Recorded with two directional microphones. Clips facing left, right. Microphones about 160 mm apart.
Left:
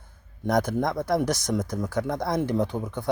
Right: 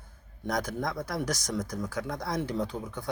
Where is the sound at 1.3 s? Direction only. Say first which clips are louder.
Left 6 dB; 25° left (ahead or behind).